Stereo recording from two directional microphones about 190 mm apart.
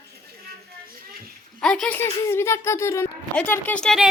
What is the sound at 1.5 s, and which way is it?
Speech, 5° left (ahead or behind).